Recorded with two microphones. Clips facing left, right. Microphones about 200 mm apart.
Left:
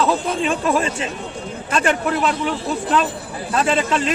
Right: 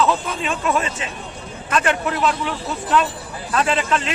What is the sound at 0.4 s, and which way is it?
Speech, 35° left (ahead or behind).